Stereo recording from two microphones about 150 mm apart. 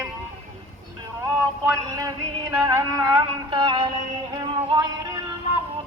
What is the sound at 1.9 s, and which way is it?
Music, 25° right (ahead or behind).